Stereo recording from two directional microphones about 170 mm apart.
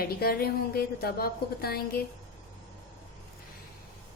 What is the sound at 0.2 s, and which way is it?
A woman's voice, 65° left (ahead or behind).